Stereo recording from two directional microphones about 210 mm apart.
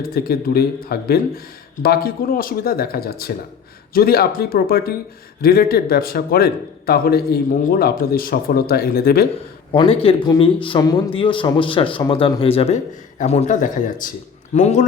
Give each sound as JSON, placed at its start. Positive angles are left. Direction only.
{"t": 0.0, "sound": "a man's voice", "side_deg": 45}
{"t": 9.7, "sound": "speech", "side_deg": 25}